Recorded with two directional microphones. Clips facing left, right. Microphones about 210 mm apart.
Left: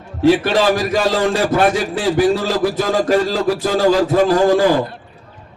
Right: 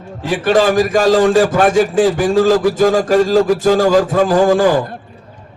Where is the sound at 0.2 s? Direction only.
50° right (ahead or behind).